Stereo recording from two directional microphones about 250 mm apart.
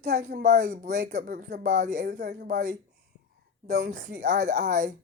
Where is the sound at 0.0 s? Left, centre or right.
Right.